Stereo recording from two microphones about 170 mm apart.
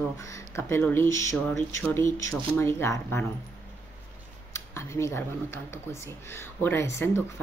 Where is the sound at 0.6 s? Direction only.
15° left (ahead or behind).